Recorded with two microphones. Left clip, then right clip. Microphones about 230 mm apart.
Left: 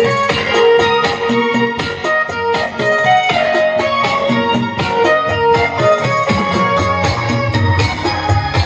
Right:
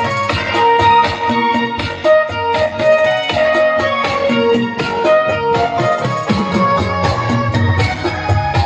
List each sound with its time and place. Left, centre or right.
0.6 s music: right
3.3 s music: right
5.0 s music: right